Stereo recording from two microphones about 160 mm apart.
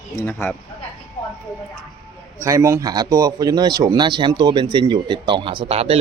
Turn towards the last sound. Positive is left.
turn(degrees=-40)  # may be behind; listen again after turning